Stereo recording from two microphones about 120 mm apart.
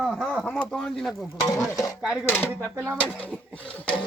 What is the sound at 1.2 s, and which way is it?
Speech, 25° left (ahead or behind).